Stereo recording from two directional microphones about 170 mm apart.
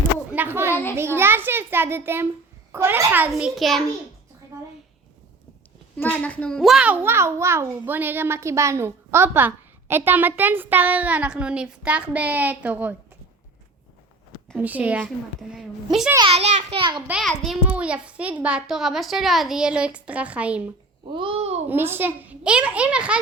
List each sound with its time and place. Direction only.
0.3 s a sound: 10° right (ahead or behind)
0.7 s a child's voice: 10° left (ahead or behind)
0.9 s a child's voice: 15° right (ahead or behind)
6.0 s a child's voice: 10° left (ahead or behind); by 13.0 s 10° right (ahead or behind)
14.5 s a child's voice: 10° right (ahead or behind)
16.1 s a child's voice: 30° right (ahead or behind)
17.1 s a child's voice: 5° right (ahead or behind)
21.0 s a child's voice: 30° right (ahead or behind)
21.7 s a child's voice: 10° right (ahead or behind)